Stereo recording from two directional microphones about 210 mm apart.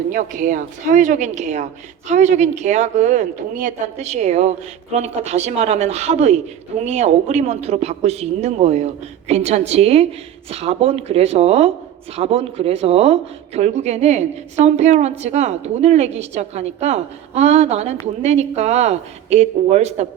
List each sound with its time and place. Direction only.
0.1 s speech: 40° right (ahead or behind)